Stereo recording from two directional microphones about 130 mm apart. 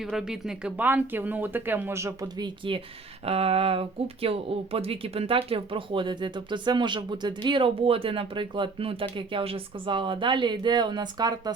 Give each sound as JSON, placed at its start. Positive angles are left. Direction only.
{"t": 0.0, "sound": "speech", "side_deg": -5}
{"t": 3.2, "sound": "speech", "side_deg": -50}